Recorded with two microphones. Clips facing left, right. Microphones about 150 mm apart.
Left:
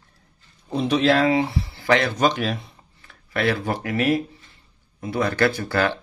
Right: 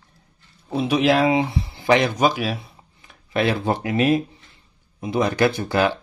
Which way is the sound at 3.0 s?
20° right (ahead or behind).